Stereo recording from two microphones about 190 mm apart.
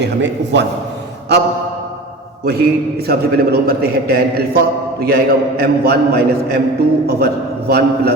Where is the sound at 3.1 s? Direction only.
55° right (ahead or behind).